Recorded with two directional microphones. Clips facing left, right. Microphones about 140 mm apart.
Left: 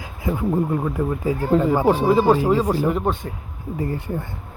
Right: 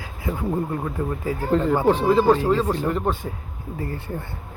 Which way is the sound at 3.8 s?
15° left (ahead or behind).